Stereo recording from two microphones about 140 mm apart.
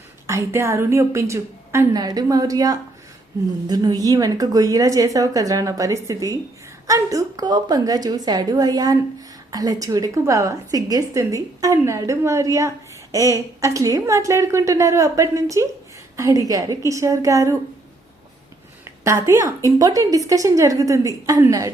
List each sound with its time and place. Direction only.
0.3 s a woman's voice: 20° right (ahead or behind)
18.9 s a woman's voice: 20° right (ahead or behind)